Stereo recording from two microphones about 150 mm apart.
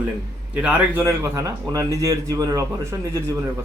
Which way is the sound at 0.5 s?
10° right (ahead or behind).